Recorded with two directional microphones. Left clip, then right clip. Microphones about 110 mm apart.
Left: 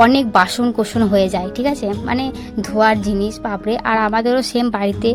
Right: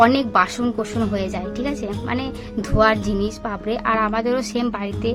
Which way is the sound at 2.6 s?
30° left (ahead or behind).